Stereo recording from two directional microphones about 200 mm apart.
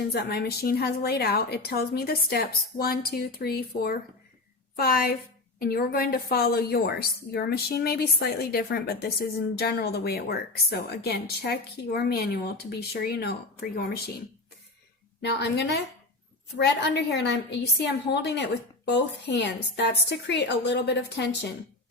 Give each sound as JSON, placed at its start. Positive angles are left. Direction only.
{"t": 0.1, "sound": "a woman's voice", "side_deg": 55}
{"t": 15.2, "sound": "a woman's voice", "side_deg": 60}